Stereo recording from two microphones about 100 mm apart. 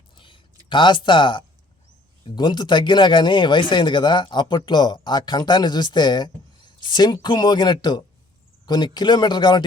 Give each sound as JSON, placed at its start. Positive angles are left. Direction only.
{"t": 0.7, "sound": "speech", "side_deg": 50}